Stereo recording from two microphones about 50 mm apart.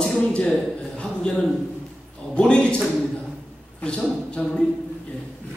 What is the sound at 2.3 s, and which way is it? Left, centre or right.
Speech, left.